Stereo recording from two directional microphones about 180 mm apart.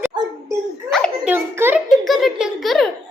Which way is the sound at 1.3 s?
10° right (ahead or behind).